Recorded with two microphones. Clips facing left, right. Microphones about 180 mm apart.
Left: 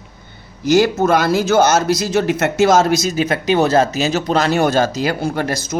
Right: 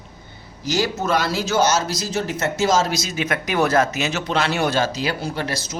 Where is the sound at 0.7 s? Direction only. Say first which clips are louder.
Left 8 dB; 55° left (ahead or behind).